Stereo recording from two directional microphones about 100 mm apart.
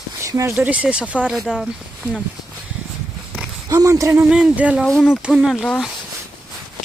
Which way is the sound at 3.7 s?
35° right (ahead or behind).